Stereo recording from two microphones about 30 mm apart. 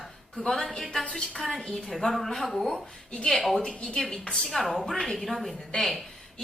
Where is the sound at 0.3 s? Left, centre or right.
Centre.